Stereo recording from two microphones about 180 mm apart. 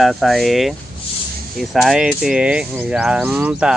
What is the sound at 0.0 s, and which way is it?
Speech, centre (ahead or behind).